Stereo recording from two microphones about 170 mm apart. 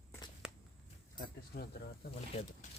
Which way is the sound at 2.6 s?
45° left (ahead or behind).